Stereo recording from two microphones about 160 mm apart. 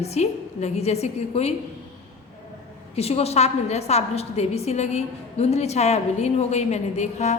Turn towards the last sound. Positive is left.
turn(degrees=45)  # may be behind; listen again after turning